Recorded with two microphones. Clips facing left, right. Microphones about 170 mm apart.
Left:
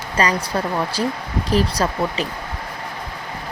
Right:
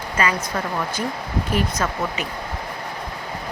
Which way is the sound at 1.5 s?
35° left (ahead or behind).